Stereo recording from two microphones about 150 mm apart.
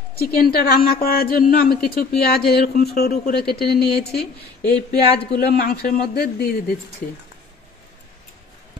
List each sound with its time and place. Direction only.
0.2 s a woman's voice: 80° left
2.2 s speech: 90° left